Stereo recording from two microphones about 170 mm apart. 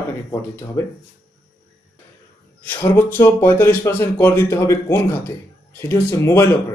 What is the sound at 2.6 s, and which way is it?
Speech, 10° left (ahead or behind).